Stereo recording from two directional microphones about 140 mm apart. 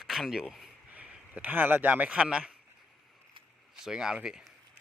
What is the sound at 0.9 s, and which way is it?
Speech, 10° right (ahead or behind).